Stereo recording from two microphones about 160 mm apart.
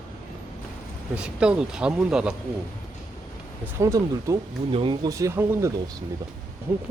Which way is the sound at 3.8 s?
20° right (ahead or behind).